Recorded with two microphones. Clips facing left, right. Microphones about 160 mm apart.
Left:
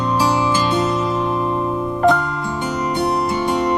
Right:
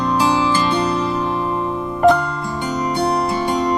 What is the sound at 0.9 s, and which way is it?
Music, 20° left (ahead or behind).